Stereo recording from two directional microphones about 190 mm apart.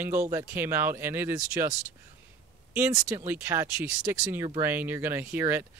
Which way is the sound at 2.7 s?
15° right (ahead or behind).